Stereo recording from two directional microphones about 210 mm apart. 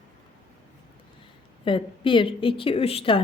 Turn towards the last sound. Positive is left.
turn(degrees=25)  # may be behind; listen again after turning